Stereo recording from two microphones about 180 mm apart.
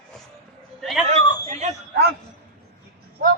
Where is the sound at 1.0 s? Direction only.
40° right (ahead or behind).